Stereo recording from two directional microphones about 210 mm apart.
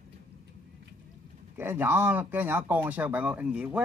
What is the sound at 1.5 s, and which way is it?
Speech, 10° right (ahead or behind).